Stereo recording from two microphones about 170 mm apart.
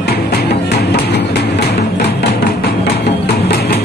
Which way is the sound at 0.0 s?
70° left (ahead or behind).